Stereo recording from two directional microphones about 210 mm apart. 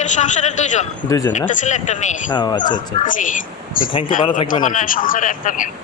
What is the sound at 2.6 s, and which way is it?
Speech, 40° left (ahead or behind).